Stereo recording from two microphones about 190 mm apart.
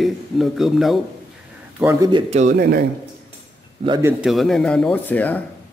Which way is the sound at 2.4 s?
50° right (ahead or behind).